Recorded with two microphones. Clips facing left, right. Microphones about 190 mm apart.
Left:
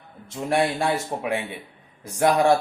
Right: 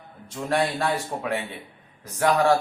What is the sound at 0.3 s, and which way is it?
A man's voice, 15° left (ahead or behind).